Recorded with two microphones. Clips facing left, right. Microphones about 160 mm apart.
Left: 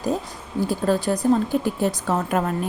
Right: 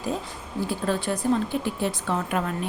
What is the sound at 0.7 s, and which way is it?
Speech, 40° left (ahead or behind).